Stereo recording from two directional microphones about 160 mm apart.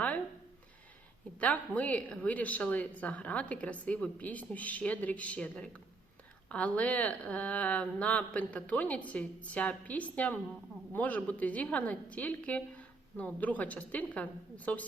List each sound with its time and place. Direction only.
1.4 s speech: 10° left (ahead or behind)